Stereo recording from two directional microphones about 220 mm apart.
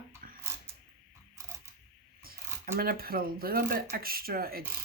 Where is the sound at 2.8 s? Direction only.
40° right (ahead or behind).